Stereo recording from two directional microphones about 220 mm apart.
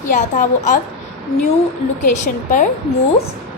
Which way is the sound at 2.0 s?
35° left (ahead or behind).